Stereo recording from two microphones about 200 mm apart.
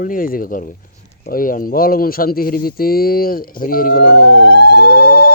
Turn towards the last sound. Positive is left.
turn(degrees=55)  # may be behind; listen again after turning